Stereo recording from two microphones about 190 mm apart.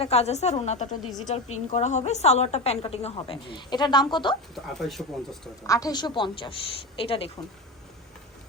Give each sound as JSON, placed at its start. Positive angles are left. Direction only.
{"t": 0.0, "sound": "a woman's voice", "side_deg": 35}
{"t": 4.5, "sound": "speech", "side_deg": 0}
{"t": 5.6, "sound": "a woman's voice", "side_deg": 20}